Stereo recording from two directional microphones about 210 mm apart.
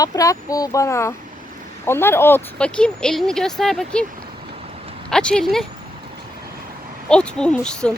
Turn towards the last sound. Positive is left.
turn(degrees=5)  # may be behind; listen again after turning